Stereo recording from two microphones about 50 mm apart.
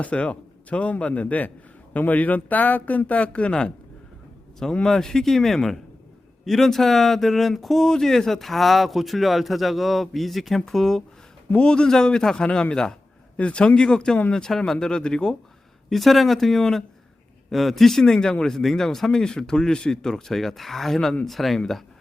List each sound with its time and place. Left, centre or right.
0.0 s a man's voice: left
4.7 s speech: centre
11.5 s a man's voice: centre
15.9 s speech: centre